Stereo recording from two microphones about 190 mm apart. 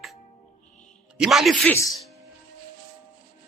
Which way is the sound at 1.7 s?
15° left (ahead or behind).